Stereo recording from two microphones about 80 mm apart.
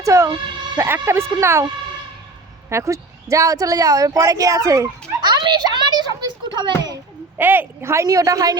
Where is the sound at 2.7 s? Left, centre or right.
Right.